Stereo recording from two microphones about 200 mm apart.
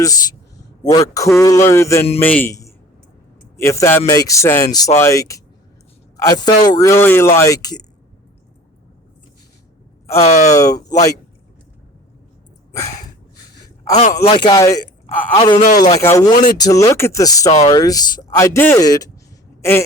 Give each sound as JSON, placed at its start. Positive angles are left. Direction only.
{"t": 0.0, "sound": "a man's voice", "side_deg": 15}
{"t": 10.2, "sound": "speech", "side_deg": 35}
{"t": 10.5, "sound": "speech", "side_deg": 15}
{"t": 14.3, "sound": "speech", "side_deg": 25}